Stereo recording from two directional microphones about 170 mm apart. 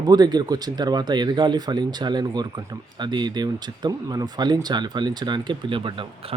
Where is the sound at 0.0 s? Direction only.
25° right (ahead or behind).